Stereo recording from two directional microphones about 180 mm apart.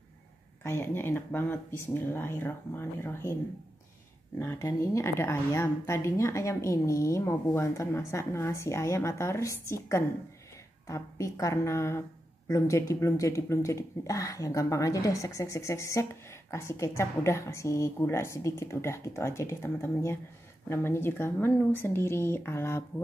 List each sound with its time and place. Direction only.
0.7 s speech: 15° left (ahead or behind)
4.4 s speech: 15° left (ahead or behind)